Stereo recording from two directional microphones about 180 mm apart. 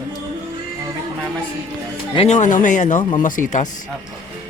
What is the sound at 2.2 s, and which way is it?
Speech, 40° left (ahead or behind).